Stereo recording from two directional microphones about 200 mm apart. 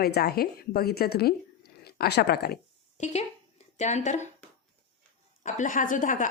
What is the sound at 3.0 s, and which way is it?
A woman's voice, 35° left (ahead or behind).